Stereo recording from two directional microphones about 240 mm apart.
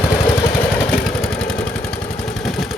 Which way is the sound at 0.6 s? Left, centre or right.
Centre.